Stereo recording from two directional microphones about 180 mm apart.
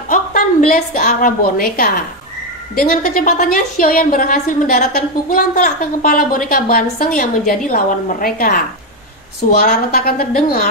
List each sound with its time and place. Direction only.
0.1 s a woman's voice: 50° left (ahead or behind)